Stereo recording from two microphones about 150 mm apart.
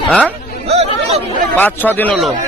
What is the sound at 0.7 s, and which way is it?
Chatter, 45° right (ahead or behind).